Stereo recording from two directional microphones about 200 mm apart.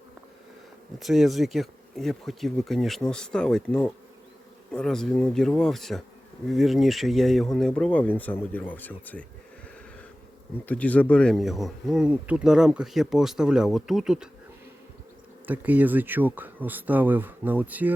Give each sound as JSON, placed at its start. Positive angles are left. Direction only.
{"t": 0.9, "sound": "speech", "side_deg": 0}
{"t": 10.7, "sound": "speech", "side_deg": 5}
{"t": 15.4, "sound": "speech", "side_deg": -10}